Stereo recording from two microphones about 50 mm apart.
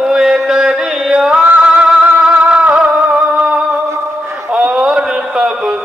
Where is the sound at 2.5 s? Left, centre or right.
Right.